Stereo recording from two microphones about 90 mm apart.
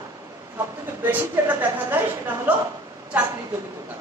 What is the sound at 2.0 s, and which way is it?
Speech, 20° right (ahead or behind).